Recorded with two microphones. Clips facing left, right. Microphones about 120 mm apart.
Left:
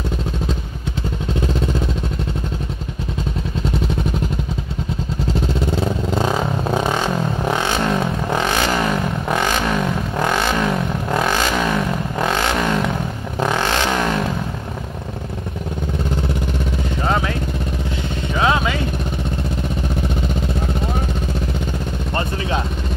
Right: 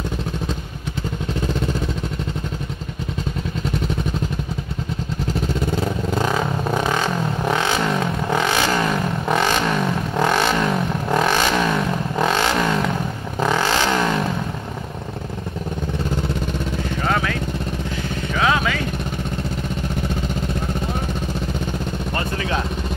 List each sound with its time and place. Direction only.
6.1 s vehicle: 15° left (ahead or behind)
10.6 s vehicle: centre (ahead or behind)
13.6 s vehicle: centre (ahead or behind)
18.4 s vehicle: 25° left (ahead or behind)